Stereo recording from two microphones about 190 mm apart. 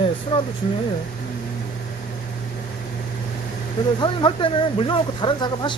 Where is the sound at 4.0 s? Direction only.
25° left (ahead or behind).